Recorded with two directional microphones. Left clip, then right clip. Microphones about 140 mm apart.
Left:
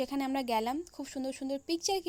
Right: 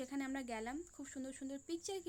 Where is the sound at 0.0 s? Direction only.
40° left (ahead or behind).